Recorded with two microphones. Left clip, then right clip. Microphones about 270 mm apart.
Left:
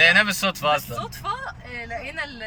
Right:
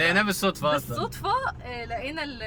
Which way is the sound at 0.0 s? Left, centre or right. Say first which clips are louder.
Left 6 dB; centre.